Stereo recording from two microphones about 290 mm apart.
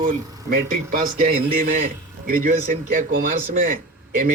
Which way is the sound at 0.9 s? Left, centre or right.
Right.